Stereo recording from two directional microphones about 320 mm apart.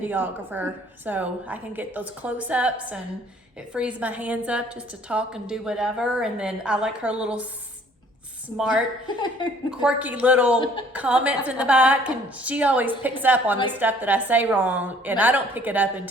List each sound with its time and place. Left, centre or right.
0.0 s a woman's voice: centre
8.4 s a woman's voice: centre
9.0 s speech: centre
9.6 s a woman's voice: centre